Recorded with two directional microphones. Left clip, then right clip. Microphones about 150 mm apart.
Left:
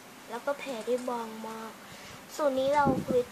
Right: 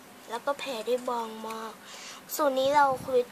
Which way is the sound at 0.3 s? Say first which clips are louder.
Right 2 dB; 40° right (ahead or behind).